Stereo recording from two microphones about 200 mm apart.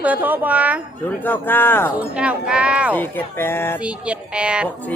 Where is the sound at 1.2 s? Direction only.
10° left (ahead or behind).